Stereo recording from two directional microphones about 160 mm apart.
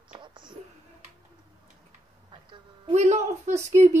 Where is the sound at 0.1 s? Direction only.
30° right (ahead or behind).